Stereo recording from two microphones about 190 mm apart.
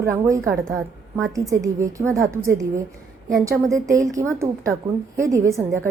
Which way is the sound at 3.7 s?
15° right (ahead or behind).